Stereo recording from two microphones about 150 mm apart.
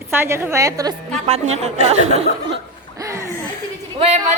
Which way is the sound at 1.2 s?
45° right (ahead or behind).